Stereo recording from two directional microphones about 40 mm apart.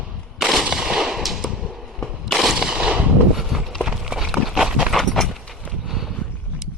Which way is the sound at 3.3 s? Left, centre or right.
Centre.